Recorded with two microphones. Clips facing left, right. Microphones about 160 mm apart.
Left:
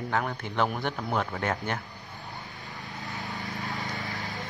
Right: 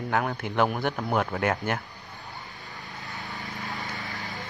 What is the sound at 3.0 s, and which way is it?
Vehicle, 20° left (ahead or behind).